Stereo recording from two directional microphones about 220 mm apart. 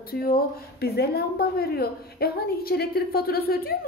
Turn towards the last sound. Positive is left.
turn(degrees=45)  # may be behind; listen again after turning